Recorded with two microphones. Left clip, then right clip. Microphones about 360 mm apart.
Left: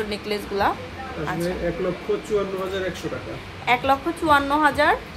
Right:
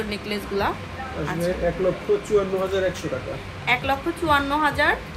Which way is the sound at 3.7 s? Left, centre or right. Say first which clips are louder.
Left 2 dB; left.